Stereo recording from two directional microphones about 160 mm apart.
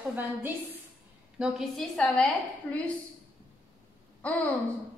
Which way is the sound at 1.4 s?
Centre (ahead or behind).